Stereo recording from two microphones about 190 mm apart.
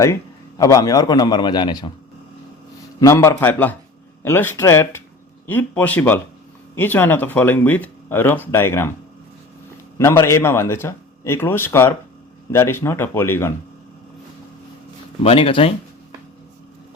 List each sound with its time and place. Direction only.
0.6 s a man's voice: 15° left (ahead or behind)
3.0 s speech: 15° left (ahead or behind)
10.0 s speech: 15° left (ahead or behind)
15.2 s a man's voice: 30° left (ahead or behind)